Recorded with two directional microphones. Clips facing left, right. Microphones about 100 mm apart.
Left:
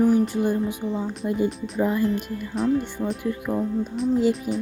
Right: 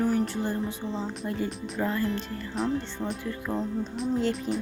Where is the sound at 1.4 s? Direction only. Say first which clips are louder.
Left 7 dB; centre (ahead or behind).